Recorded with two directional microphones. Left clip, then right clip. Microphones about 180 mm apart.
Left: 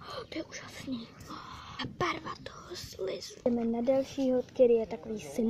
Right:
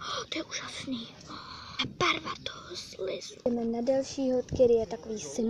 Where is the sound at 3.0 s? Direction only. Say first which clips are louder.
Even; 5° left (ahead or behind).